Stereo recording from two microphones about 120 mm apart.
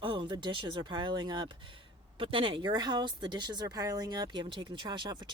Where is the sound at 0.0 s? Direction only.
45° right (ahead or behind).